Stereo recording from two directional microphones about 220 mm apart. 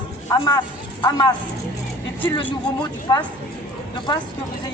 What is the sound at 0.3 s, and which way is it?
Speech, 15° left (ahead or behind).